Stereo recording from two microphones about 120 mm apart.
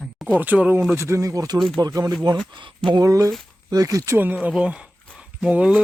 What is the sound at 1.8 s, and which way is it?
Speech, 35° right (ahead or behind).